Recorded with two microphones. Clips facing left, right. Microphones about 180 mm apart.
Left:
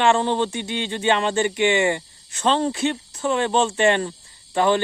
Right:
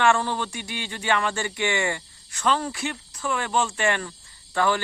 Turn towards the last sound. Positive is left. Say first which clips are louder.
# left 4 dB
turn(degrees=20)  # may be behind; listen again after turning